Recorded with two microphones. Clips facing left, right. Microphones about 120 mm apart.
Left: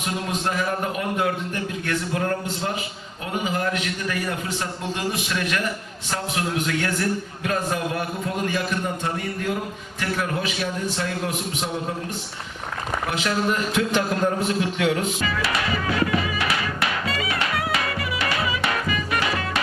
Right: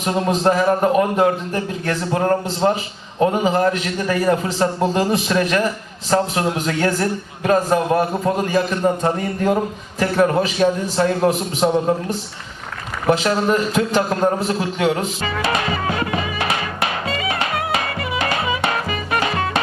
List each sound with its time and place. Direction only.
0.0 s a man's voice: 35° right (ahead or behind)
13.1 s a sound: 35° right (ahead or behind)
18.3 s music: 40° right (ahead or behind)